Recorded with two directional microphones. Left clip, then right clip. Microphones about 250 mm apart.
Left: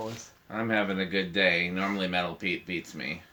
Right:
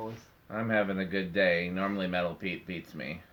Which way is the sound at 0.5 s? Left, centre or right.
Right.